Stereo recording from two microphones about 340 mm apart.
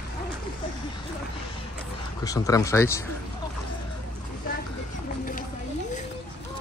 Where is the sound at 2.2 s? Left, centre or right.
Centre.